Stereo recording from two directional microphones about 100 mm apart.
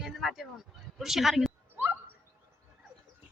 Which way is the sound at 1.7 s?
20° right (ahead or behind).